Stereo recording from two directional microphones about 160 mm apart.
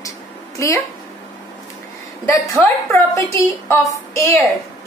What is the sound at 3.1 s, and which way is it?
A woman's voice, 20° left (ahead or behind).